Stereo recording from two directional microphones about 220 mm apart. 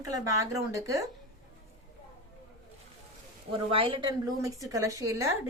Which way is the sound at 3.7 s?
25° right (ahead or behind).